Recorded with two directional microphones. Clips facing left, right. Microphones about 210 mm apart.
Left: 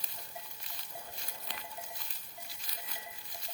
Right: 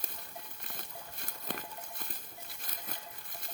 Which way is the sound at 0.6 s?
55° right (ahead or behind).